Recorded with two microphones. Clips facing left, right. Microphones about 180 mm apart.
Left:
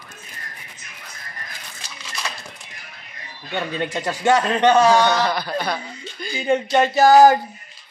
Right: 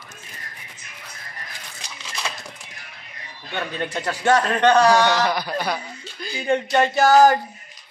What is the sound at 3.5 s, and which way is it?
A man's voice, 15° left (ahead or behind).